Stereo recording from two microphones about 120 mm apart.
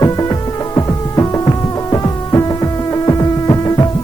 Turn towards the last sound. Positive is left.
turn(degrees=30)  # may be behind; listen again after turning